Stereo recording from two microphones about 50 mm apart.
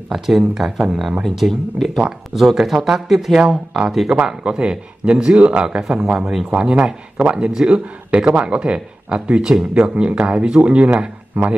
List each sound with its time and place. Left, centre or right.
0.1 s a man's voice: centre; by 11.5 s right